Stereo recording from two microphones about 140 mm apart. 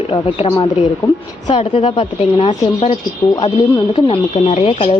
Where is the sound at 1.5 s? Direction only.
45° left (ahead or behind).